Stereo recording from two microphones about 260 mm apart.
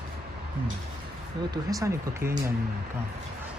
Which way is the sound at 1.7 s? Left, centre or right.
Centre.